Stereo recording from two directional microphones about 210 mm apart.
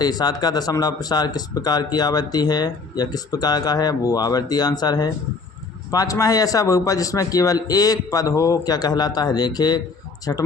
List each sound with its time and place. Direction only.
0.0 s a man's voice: 20° left (ahead or behind)